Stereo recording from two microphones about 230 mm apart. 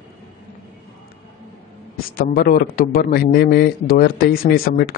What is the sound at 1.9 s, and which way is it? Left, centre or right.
A man's voice, left.